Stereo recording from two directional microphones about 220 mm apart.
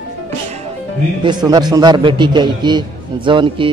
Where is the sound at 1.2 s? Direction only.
20° right (ahead or behind).